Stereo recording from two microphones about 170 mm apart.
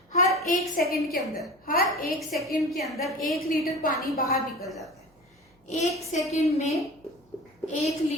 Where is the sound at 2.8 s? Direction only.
Centre (ahead or behind).